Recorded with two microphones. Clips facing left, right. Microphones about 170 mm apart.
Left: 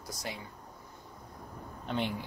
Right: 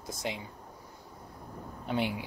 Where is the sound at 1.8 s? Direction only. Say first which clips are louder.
Right 2 dB; 10° right (ahead or behind).